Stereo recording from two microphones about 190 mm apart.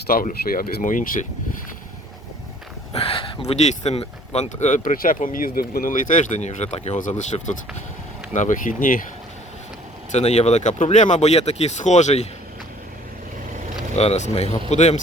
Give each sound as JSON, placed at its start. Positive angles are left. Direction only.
{"t": 0.1, "sound": "speech", "side_deg": 50}
{"t": 2.9, "sound": "speech", "side_deg": 30}
{"t": 10.1, "sound": "speech", "side_deg": 35}
{"t": 13.9, "sound": "speech", "side_deg": 35}